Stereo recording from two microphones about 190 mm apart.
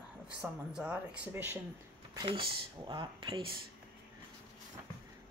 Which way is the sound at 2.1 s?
25° right (ahead or behind).